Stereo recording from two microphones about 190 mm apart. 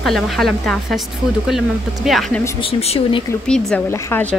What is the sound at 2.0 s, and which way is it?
Speech, centre (ahead or behind).